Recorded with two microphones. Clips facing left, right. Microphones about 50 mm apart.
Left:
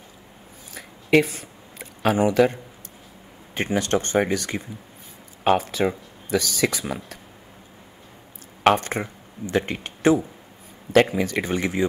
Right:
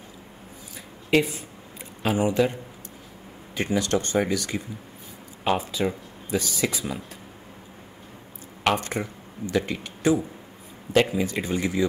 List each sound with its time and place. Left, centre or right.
0.7 s a sound: left
3.5 s speech: left
8.6 s speech: left
11.2 s speech: left